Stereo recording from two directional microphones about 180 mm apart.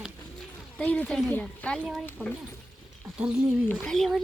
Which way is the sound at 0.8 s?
5° left (ahead or behind).